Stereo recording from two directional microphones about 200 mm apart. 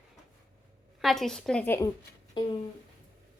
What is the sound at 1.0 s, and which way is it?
Speech, centre (ahead or behind).